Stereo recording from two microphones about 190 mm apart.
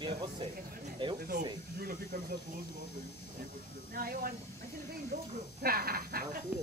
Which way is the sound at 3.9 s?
50° right (ahead or behind).